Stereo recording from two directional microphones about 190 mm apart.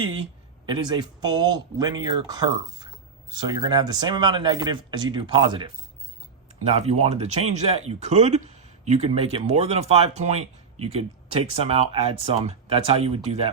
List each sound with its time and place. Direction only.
0.6 s speech: 25° right (ahead or behind)